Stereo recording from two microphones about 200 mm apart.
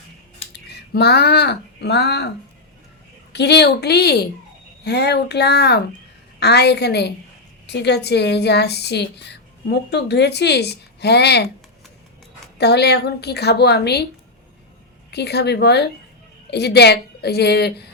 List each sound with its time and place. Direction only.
0.5 s speech: 55° left (ahead or behind)
3.3 s a woman's voice: 55° left (ahead or behind)
12.5 s speech: 55° left (ahead or behind)
15.1 s speech: 55° left (ahead or behind)